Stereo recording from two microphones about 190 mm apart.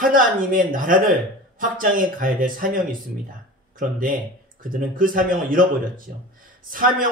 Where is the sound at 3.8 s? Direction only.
45° right (ahead or behind).